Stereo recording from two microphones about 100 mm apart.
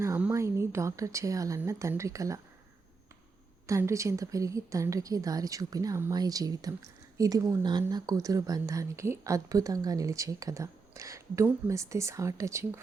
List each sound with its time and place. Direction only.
0.3 s a woman's voice: 30° right (ahead or behind)
3.7 s speech: 30° right (ahead or behind)
7.6 s speech: 45° right (ahead or behind); by 12.8 s 30° right (ahead or behind)